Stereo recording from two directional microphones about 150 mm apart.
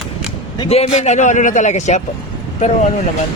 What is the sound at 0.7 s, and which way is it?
A man's voice, 45° left (ahead or behind).